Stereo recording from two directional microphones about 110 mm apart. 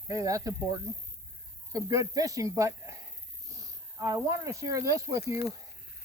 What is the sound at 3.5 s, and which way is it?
Wheeze, 30° right (ahead or behind).